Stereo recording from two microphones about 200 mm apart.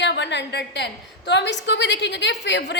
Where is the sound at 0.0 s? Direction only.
60° left (ahead or behind).